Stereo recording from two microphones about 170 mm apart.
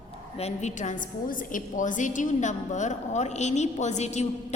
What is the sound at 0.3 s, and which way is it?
A woman's voice, 40° left (ahead or behind).